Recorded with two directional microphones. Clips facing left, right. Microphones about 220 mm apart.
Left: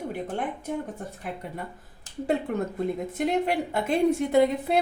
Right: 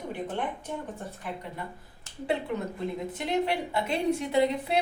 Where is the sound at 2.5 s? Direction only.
50° left (ahead or behind).